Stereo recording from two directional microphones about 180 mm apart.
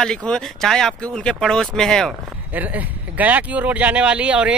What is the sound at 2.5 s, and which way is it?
Speech, 10° right (ahead or behind).